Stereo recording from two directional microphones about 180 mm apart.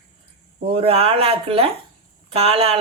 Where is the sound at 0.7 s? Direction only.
35° right (ahead or behind).